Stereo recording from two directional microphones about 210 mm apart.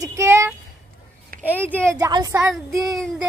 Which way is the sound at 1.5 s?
10° left (ahead or behind).